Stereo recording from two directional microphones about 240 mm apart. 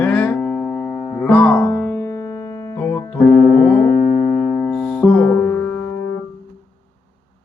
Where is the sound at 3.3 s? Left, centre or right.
Left.